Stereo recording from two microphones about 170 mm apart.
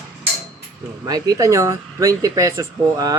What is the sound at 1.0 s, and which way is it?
Speech, 20° right (ahead or behind).